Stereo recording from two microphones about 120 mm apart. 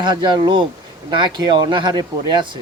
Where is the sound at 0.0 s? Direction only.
40° right (ahead or behind).